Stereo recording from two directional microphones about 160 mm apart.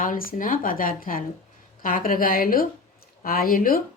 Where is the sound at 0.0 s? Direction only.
60° left (ahead or behind).